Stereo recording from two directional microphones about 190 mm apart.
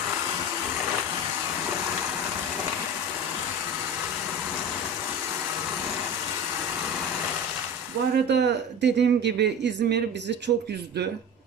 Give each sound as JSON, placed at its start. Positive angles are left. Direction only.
{"t": 8.1, "sound": "speech", "side_deg": -60}